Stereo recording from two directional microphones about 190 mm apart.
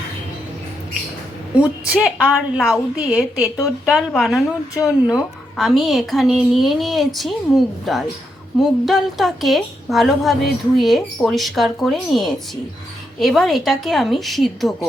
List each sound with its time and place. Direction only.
1.5 s a woman's voice: 5° right (ahead or behind)